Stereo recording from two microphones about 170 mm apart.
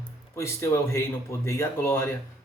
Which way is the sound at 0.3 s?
15° left (ahead or behind).